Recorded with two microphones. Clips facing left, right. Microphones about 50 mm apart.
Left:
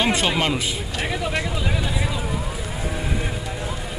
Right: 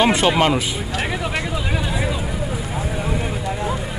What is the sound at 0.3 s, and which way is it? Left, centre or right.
Speech, right.